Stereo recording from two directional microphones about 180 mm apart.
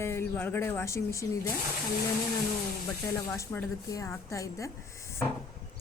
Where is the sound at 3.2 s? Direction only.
15° left (ahead or behind).